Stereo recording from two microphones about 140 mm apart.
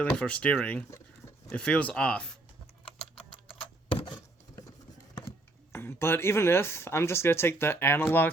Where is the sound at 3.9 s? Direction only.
35° left (ahead or behind).